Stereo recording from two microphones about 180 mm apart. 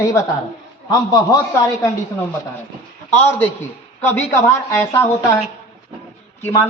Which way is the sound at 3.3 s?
10° left (ahead or behind).